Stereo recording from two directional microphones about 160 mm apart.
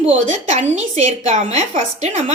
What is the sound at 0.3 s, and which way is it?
A woman's voice, 50° right (ahead or behind).